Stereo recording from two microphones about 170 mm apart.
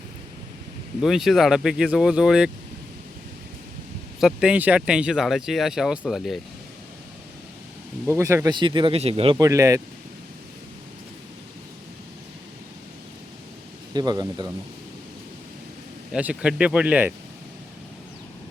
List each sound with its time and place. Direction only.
1.0 s speech: centre (ahead or behind)
4.2 s speech: 5° right (ahead or behind)
8.0 s speech: 15° right (ahead or behind)
8.5 s speech: 30° right (ahead or behind)
9.4 s speech: 20° right (ahead or behind)
13.9 s speech: 25° right (ahead or behind)
16.1 s speech: 5° right (ahead or behind)